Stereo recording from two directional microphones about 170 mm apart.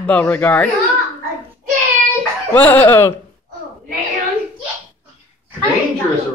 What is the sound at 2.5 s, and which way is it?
Speech, 10° left (ahead or behind).